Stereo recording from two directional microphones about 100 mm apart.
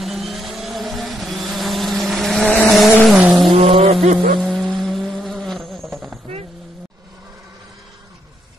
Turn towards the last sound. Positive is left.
turn(degrees=-5)  # may be behind; listen again after turning